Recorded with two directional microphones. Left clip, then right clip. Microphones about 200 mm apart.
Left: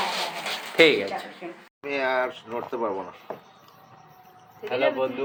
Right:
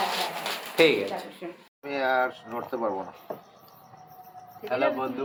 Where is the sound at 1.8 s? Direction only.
5° right (ahead or behind).